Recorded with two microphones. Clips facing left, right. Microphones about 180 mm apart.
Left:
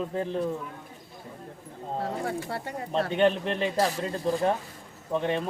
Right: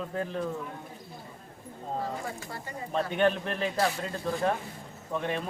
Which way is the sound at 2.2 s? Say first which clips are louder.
Left 7 dB; 70° left (ahead or behind).